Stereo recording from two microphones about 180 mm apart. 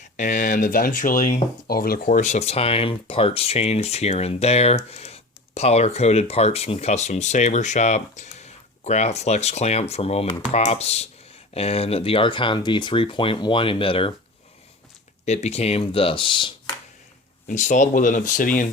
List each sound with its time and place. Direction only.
0.0 s speech: 45° left (ahead or behind)
1.6 s speech: 55° left (ahead or behind); by 14.1 s 30° left (ahead or behind)
15.2 s speech: 40° left (ahead or behind)
17.5 s speech: 45° left (ahead or behind)